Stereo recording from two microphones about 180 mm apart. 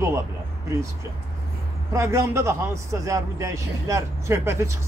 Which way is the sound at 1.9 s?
15° right (ahead or behind).